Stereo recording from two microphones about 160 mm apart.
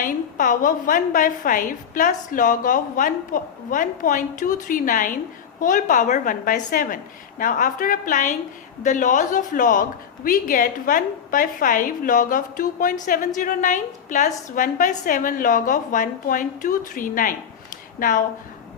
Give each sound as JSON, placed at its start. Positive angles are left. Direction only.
{"t": 0.0, "sound": "a woman's voice", "side_deg": 55}